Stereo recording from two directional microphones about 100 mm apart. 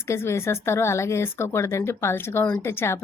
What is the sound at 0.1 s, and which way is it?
A woman's voice, 25° left (ahead or behind).